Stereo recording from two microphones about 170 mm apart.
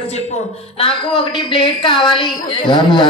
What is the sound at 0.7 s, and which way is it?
A woman's voice, 30° left (ahead or behind).